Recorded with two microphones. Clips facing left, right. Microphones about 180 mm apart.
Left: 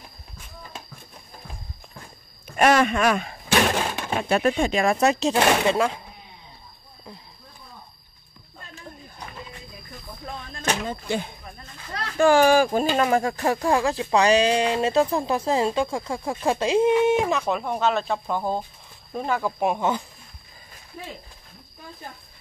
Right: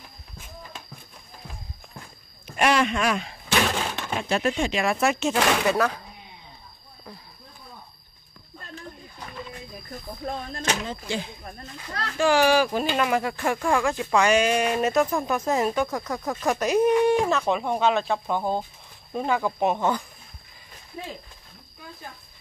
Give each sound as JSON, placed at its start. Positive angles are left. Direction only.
{"t": 2.5, "sound": "a sound", "side_deg": 45}
{"t": 4.1, "sound": "speech", "side_deg": 55}
{"t": 5.0, "sound": "speech", "side_deg": 35}
{"t": 10.2, "sound": "speech", "side_deg": -45}
{"t": 10.6, "sound": "speech", "side_deg": 55}
{"t": 17.4, "sound": "speech", "side_deg": 5}